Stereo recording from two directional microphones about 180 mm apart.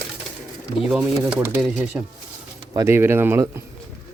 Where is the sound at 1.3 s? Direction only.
5° right (ahead or behind).